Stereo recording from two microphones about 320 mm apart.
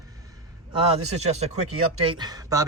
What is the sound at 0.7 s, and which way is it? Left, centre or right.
A man's voice, centre.